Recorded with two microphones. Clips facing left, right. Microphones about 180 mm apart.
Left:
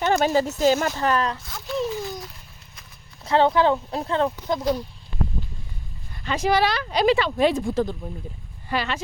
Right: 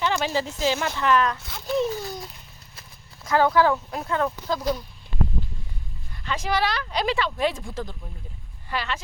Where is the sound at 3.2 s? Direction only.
25° left (ahead or behind).